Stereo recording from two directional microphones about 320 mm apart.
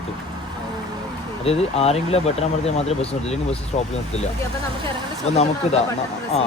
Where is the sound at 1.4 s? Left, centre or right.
Centre.